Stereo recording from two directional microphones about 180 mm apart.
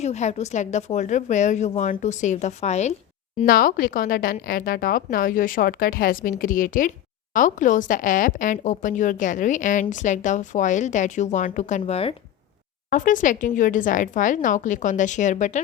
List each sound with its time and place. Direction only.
0.0 s a woman's voice: 40° left (ahead or behind)
3.4 s a woman's voice: 50° left (ahead or behind); by 12.1 s 35° left (ahead or behind)
12.9 s a woman's voice: 45° left (ahead or behind)